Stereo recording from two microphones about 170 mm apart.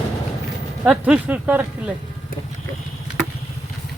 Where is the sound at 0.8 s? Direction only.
5° right (ahead or behind).